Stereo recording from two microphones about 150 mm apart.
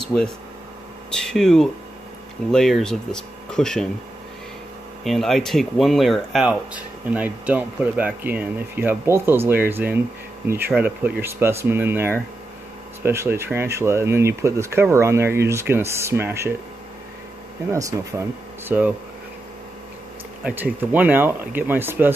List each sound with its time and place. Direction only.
0.0 s speech: 5° left (ahead or behind)
5.0 s speech: centre (ahead or behind); by 16.5 s 15° right (ahead or behind)
17.6 s speech: 20° right (ahead or behind)
18.7 s speech: 10° right (ahead or behind)
20.4 s speech: 10° right (ahead or behind)